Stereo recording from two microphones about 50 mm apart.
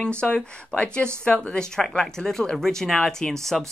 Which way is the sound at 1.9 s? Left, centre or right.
Centre.